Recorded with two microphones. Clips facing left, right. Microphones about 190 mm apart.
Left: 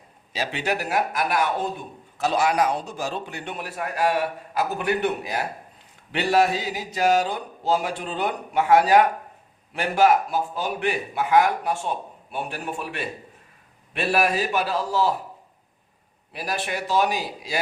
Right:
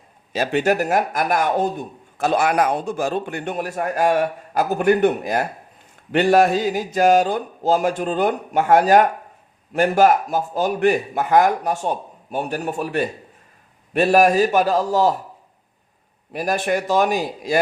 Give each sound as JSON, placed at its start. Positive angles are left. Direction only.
{"t": 0.3, "sound": "speech", "side_deg": -50}
{"t": 16.3, "sound": "speech", "side_deg": -45}